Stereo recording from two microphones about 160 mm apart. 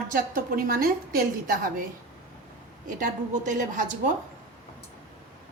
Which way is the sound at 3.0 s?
50° right (ahead or behind).